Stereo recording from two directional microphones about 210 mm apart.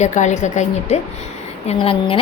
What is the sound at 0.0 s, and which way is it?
A woman's voice, 35° left (ahead or behind).